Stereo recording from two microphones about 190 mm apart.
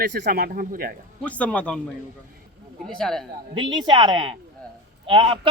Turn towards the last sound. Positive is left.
turn(degrees=-25)  # may be behind; listen again after turning